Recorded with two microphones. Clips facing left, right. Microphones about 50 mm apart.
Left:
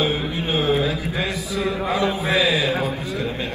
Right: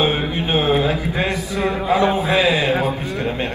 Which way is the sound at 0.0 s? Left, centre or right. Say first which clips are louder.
Right 3 dB; right.